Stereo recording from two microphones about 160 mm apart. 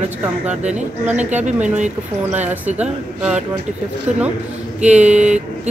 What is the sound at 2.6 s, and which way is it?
Speech, 5° right (ahead or behind).